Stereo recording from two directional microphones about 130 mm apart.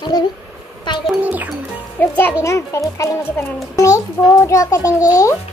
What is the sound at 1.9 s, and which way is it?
A child's voice, 15° left (ahead or behind).